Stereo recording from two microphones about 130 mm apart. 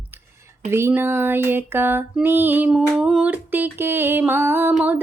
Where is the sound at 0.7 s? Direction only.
20° right (ahead or behind).